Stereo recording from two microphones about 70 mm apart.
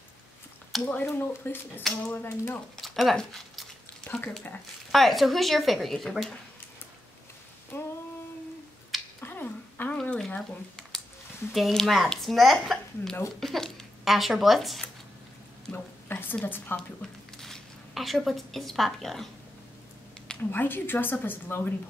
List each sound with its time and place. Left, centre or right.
0.8 s a woman's voice: left
1.8 s speech: centre
2.2 s speech: left
2.8 s a sound: centre
3.2 s speech: centre
4.9 s speech: centre
7.7 s female singing: left
9.2 s finger snapping: left
10.0 s a sound: centre
11.5 s speech: centre
15.7 s a sound: left
16.4 s a woman's voice: left
16.7 s speech: centre
20.5 s a woman's voice: left